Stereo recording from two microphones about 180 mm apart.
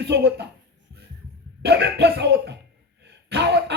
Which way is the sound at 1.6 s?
65° right (ahead or behind).